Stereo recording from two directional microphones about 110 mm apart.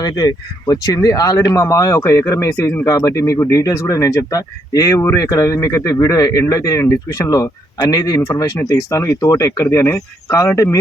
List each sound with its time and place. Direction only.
0.0 s speech: 35° left (ahead or behind)